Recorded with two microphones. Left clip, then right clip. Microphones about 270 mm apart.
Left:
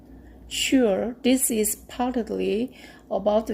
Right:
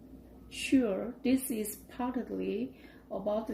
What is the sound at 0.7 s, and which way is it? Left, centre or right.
Speech, left.